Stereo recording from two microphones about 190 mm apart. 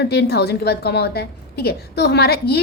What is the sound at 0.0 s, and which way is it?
A woman's voice, 60° left (ahead or behind).